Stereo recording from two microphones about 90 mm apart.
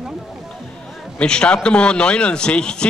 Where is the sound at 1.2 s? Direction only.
10° left (ahead or behind).